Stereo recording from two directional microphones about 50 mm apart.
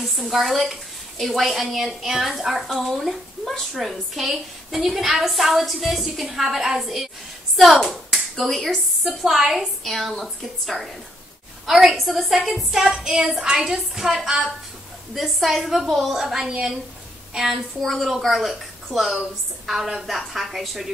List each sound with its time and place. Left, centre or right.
0.0 s a woman's voice: centre
17.7 s a woman's voice: centre